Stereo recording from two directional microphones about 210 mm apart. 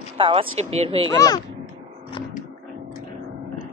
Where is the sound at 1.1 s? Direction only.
15° left (ahead or behind).